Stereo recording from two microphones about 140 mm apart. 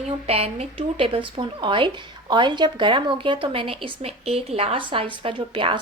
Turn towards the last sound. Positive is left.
turn(degrees=-35)  # may be behind; listen again after turning